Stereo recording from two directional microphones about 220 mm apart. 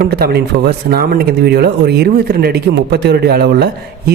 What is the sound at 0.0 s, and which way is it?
Speech, 45° right (ahead or behind).